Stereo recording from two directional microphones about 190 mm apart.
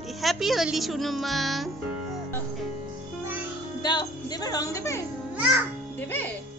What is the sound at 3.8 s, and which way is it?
Speech, 20° left (ahead or behind).